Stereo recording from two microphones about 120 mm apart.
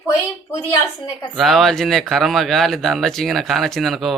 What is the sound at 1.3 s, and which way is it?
A woman's voice, centre (ahead or behind).